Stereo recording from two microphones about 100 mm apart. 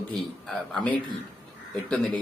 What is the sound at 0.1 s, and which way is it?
Speech, centre (ahead or behind).